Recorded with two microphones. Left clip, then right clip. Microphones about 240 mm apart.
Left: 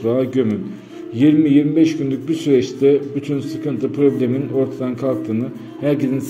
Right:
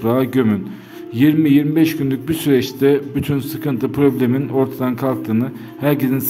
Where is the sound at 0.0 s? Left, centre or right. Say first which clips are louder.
Right 1 dB; right.